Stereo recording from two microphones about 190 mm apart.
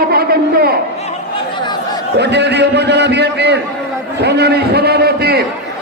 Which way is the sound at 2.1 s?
60° right (ahead or behind).